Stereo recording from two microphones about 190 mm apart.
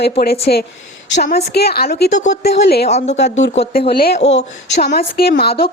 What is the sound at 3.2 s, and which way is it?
Speech, 65° left (ahead or behind).